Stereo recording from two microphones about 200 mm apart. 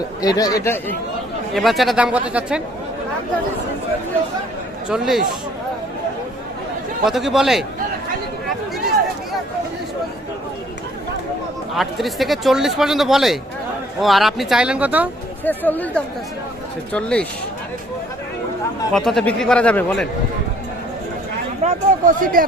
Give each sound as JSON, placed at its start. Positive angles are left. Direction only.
{"t": 0.2, "sound": "speech", "side_deg": 20}
{"t": 1.5, "sound": "a man's voice", "side_deg": 0}
{"t": 4.9, "sound": "a man's voice", "side_deg": 0}
{"t": 7.0, "sound": "a man's voice", "side_deg": 0}
{"t": 11.7, "sound": "a man's voice", "side_deg": 0}
{"t": 15.4, "sound": "a man's voice", "side_deg": 10}
{"t": 18.9, "sound": "a man's voice", "side_deg": 0}
{"t": 21.6, "sound": "speech", "side_deg": -40}